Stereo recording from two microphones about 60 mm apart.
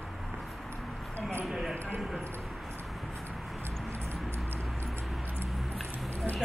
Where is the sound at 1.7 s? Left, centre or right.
Right.